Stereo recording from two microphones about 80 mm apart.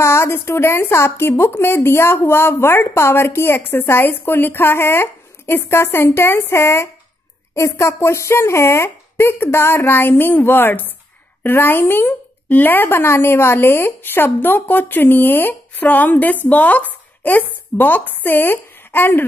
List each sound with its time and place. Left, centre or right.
0.0 s a woman's voice: left